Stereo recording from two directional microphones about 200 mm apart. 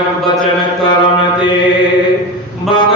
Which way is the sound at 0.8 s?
25° left (ahead or behind).